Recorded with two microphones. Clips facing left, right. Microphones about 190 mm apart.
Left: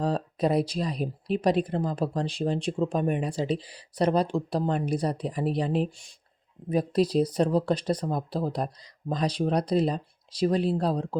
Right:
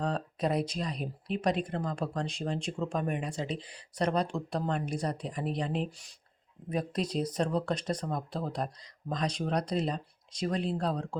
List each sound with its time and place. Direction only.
0.0 s speech: 35° left (ahead or behind)
5.7 s speech: 5° left (ahead or behind)
6.7 s speech: 35° left (ahead or behind)